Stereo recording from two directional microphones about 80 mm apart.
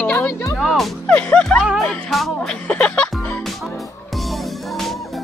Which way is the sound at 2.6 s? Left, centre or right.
Centre.